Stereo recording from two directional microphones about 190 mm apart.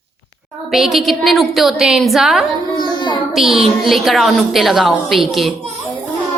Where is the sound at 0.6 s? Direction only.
Centre (ahead or behind).